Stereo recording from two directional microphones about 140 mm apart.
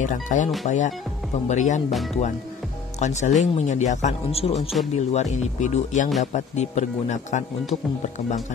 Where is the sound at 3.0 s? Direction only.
55° left (ahead or behind).